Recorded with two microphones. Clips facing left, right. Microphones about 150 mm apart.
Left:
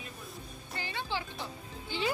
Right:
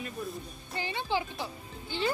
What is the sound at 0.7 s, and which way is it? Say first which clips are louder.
Speech: right 5 dB; 20° right (ahead or behind).